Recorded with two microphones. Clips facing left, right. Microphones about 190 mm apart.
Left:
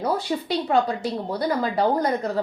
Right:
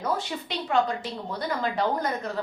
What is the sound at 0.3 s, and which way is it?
A woman's voice, 30° left (ahead or behind).